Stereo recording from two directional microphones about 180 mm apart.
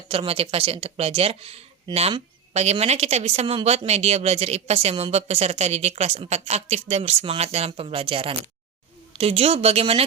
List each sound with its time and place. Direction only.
0.1 s speech: 30° right (ahead or behind)